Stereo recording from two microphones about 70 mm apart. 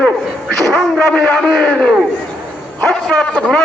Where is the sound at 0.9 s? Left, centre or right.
Centre.